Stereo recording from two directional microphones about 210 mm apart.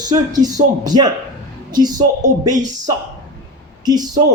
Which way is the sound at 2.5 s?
35° right (ahead or behind).